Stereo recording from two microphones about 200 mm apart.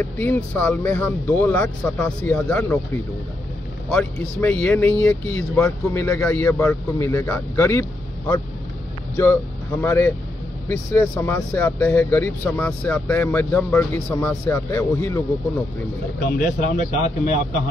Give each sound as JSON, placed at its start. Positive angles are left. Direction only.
{"t": 0.0, "sound": "speech", "side_deg": 10}
{"t": 3.9, "sound": "speech", "side_deg": 10}
{"t": 9.1, "sound": "speech", "side_deg": 15}
{"t": 16.3, "sound": "speech", "side_deg": 40}